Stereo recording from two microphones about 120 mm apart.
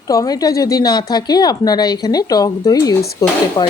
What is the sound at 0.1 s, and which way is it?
A woman's voice, 30° left (ahead or behind).